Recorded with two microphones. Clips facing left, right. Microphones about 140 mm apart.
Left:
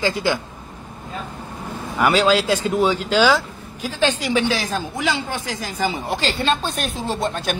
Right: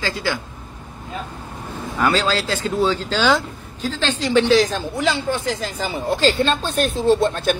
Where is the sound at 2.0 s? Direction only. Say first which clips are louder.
Left 3 dB; 10° left (ahead or behind).